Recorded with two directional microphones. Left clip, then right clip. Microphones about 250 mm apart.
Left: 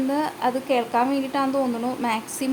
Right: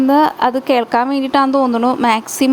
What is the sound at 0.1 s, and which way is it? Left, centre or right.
A woman's voice, right.